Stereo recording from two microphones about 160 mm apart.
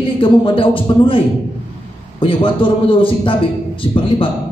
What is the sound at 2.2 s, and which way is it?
A man's voice, 35° left (ahead or behind).